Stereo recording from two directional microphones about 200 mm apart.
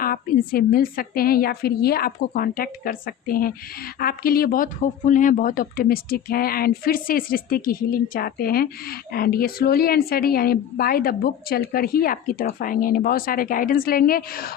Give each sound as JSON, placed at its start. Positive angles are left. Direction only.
{"t": 0.0, "sound": "speech", "side_deg": 45}